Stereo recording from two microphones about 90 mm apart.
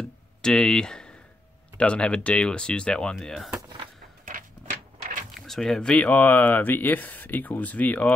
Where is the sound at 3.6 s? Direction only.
60° right (ahead or behind).